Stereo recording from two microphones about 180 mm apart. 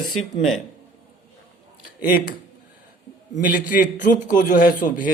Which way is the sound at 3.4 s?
50° left (ahead or behind).